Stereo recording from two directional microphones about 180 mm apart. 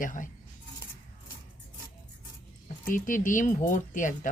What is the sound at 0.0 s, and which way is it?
Speech, 45° left (ahead or behind).